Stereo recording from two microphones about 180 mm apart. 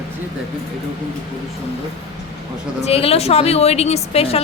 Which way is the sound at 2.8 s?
35° left (ahead or behind).